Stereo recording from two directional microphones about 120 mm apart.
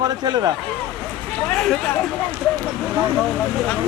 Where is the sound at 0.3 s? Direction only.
35° right (ahead or behind).